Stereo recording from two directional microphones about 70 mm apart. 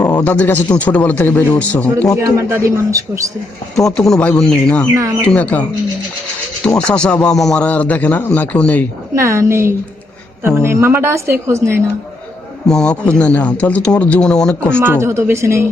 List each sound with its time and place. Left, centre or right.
0.0 s a sound: left
0.3 s speech: left
2.1 s a man's voice: right
3.8 s speech: centre
4.5 s a man's voice: centre
6.7 s a man's voice: centre
7.6 s speech: left
9.1 s a woman's voice: right
12.6 s a man's voice: centre
14.8 s a woman's voice: right